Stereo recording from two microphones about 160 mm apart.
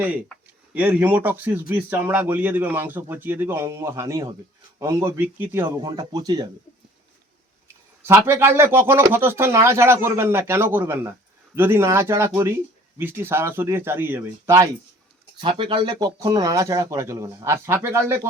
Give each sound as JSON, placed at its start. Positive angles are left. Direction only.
{"t": 0.7, "sound": "speech", "side_deg": -10}
{"t": 5.8, "sound": "speech", "side_deg": -25}
{"t": 8.0, "sound": "speech", "side_deg": -15}
{"t": 15.4, "sound": "speech", "side_deg": -30}